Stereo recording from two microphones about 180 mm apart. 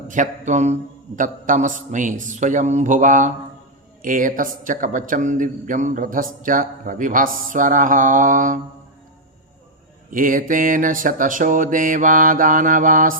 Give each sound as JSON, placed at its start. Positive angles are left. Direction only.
{"t": 0.1, "sound": "a man's voice", "side_deg": -45}
{"t": 10.1, "sound": "a man's voice", "side_deg": -50}